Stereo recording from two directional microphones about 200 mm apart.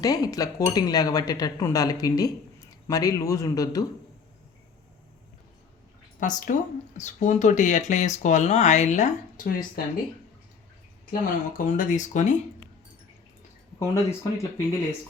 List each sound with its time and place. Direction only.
0.0 s speech: 20° left (ahead or behind)
6.1 s speech: 40° left (ahead or behind)
11.1 s speech: 40° left (ahead or behind)
13.7 s speech: 15° left (ahead or behind)